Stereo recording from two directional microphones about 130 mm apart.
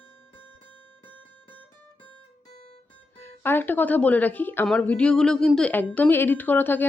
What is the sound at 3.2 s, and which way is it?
A woman's voice, 15° left (ahead or behind).